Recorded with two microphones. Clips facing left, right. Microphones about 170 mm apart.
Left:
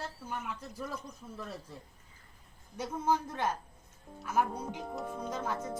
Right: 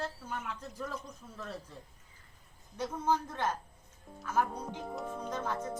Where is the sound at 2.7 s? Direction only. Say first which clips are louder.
Even; 10° left (ahead or behind).